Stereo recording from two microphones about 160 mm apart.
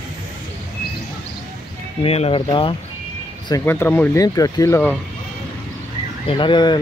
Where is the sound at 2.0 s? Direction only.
40° left (ahead or behind).